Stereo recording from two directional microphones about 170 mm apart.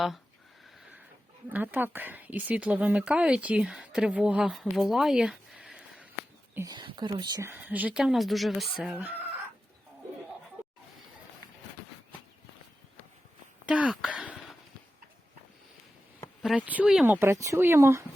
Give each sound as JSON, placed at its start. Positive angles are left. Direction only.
{"t": 1.5, "sound": "a woman's voice", "side_deg": -10}
{"t": 6.5, "sound": "speech", "side_deg": -15}
{"t": 6.7, "sound": "speech", "side_deg": -25}
{"t": 7.5, "sound": "speech", "side_deg": -10}
{"t": 13.7, "sound": "speech", "side_deg": -5}
{"t": 16.4, "sound": "speech", "side_deg": -5}
{"t": 17.2, "sound": "a woman's voice", "side_deg": -15}